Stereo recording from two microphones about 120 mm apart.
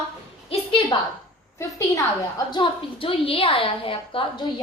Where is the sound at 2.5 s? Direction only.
45° left (ahead or behind).